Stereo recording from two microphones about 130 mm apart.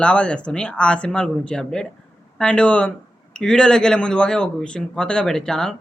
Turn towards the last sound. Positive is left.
turn(degrees=5)  # may be behind; listen again after turning